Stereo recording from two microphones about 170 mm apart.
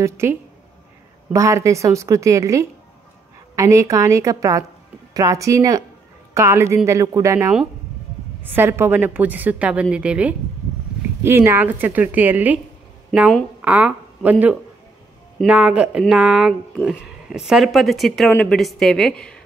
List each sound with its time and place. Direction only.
0.0 s a woman's voice: 15° right (ahead or behind); by 19.4 s 5° left (ahead or behind)